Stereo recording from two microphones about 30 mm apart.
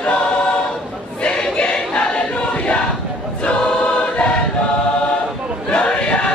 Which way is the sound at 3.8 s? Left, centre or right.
Left.